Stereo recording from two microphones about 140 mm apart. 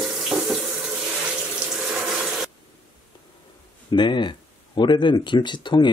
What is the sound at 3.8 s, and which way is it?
Speech, 35° left (ahead or behind).